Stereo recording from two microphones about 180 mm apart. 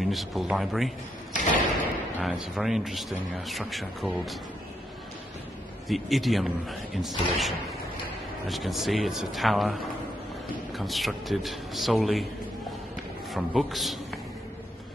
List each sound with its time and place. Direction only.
0.0 s speech: centre (ahead or behind)
1.3 s a sound: 45° left (ahead or behind)
2.1 s speech: 5° right (ahead or behind)
5.9 s speech: centre (ahead or behind)
13.3 s speech: centre (ahead or behind)